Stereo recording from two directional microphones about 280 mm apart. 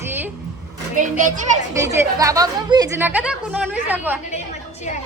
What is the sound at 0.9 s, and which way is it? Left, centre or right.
Speech, right.